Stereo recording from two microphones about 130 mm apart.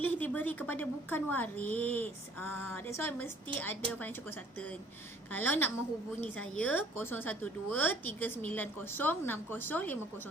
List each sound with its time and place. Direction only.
0.0 s a woman's voice: 15° left (ahead or behind)
5.3 s a woman's voice: 15° left (ahead or behind)